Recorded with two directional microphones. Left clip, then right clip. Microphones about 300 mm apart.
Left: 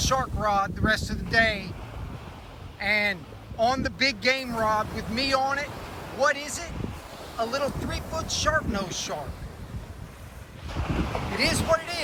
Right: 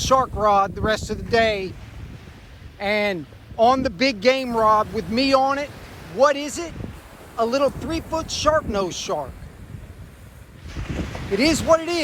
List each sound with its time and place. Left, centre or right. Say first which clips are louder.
0.0 s speech: right 7 dB; centre
2.7 s speech: right 3 dB; centre
10.9 s boat: left 1 dB; left
11.3 s speech: right 7 dB; centre